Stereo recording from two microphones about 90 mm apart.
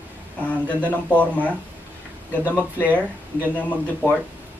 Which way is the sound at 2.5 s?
20° right (ahead or behind).